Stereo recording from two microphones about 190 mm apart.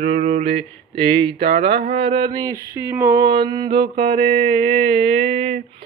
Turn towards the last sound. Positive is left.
turn(degrees=-30)  # may be behind; listen again after turning